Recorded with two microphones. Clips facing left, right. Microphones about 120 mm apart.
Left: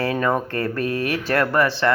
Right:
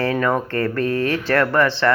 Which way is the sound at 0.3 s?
15° left (ahead or behind).